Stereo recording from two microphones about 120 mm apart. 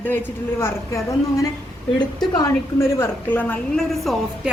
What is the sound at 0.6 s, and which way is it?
Speech, 25° left (ahead or behind).